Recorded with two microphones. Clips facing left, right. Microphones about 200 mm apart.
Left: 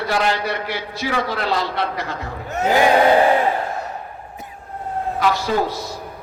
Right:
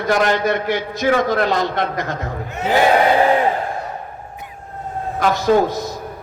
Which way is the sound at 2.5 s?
45° left (ahead or behind).